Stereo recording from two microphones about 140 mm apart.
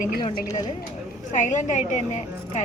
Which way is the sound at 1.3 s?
60° left (ahead or behind).